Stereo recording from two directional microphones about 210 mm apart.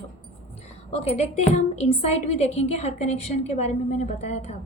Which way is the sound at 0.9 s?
30° left (ahead or behind).